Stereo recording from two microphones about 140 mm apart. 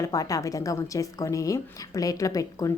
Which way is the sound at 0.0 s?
25° left (ahead or behind).